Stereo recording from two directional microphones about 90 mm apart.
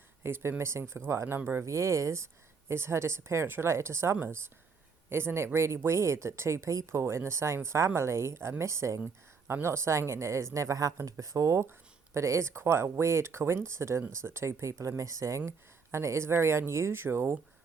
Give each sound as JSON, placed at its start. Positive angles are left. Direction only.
{"t": 0.2, "sound": "speech", "side_deg": -25}
{"t": 1.6, "sound": "speech", "side_deg": -35}